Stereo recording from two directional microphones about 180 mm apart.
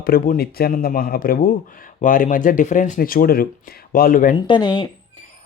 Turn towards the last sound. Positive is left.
turn(degrees=25)  # may be behind; listen again after turning